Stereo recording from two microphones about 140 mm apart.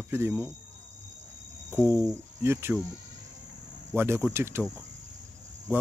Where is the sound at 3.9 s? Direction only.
15° right (ahead or behind).